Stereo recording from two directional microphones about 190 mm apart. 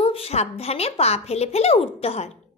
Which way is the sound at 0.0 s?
30° left (ahead or behind).